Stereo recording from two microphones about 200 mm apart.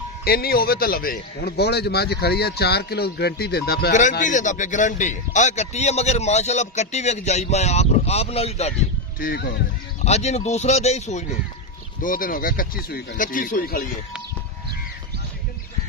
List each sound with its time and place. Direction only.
0.2 s a man's voice: 50° left (ahead or behind); by 8.7 s 30° left (ahead or behind)
9.2 s a man's voice: 50° left (ahead or behind)
10.0 s a man's voice: 35° left (ahead or behind)